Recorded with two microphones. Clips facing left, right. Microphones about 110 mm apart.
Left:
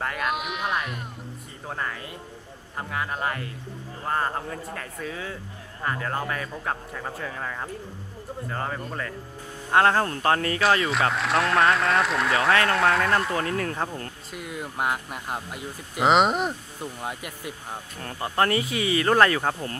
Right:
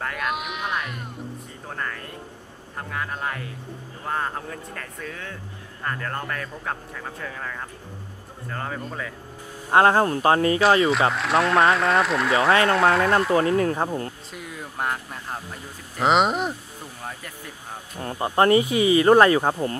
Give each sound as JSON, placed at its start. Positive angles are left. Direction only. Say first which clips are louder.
{"t": 0.0, "sound": "sheep", "louder": "even", "side_deg": 0}
{"t": 1.7, "sound": "speech", "louder": "left 1 dB", "side_deg": 5}
{"t": 9.7, "sound": "speech", "louder": "right 3 dB", "side_deg": -20}
{"t": 10.6, "sound": "speech", "louder": "right 4 dB", "side_deg": 0}
{"t": 13.6, "sound": "speech", "louder": "right 6 dB", "side_deg": -20}
{"t": 14.3, "sound": "speech", "louder": "left 2 dB", "side_deg": 5}
{"t": 17.0, "sound": "speech", "louder": "left 1 dB", "side_deg": 10}
{"t": 17.9, "sound": "speech", "louder": "right 4 dB", "side_deg": -20}